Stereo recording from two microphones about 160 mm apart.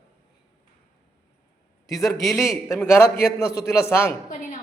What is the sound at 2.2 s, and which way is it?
Speech, centre (ahead or behind).